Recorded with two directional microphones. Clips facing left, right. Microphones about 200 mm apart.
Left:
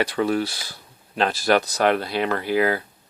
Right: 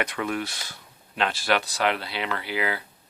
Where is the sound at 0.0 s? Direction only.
35° left (ahead or behind).